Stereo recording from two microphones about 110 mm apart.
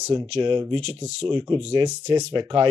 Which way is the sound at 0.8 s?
80° right.